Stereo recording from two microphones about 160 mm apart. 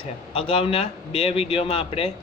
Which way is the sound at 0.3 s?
35° left (ahead or behind).